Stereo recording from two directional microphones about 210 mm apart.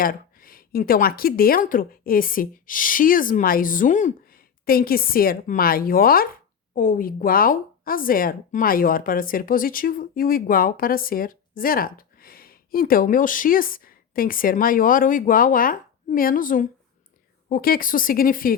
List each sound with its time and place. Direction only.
0.0 s a woman's voice: 45° left (ahead or behind)